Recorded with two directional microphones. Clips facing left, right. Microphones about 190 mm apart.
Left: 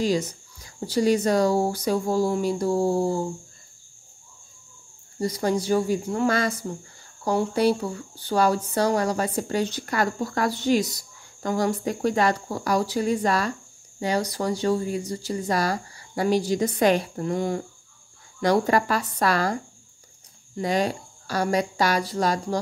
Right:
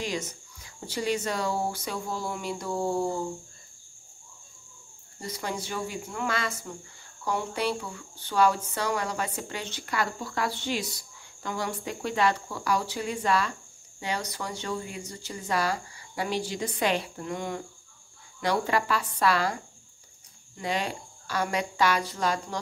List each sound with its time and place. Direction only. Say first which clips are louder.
0.0 s speech: left 9 dB; 35° left (ahead or behind)
5.2 s a woman's voice: left 10 dB; 40° left (ahead or behind)
20.5 s speech: left 7 dB; 40° left (ahead or behind)